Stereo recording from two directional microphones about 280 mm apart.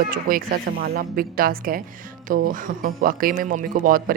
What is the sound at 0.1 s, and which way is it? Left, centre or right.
Speech, right.